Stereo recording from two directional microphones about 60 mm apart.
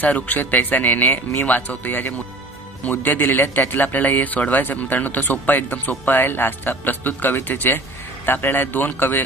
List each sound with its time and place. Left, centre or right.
0.0 s speech: left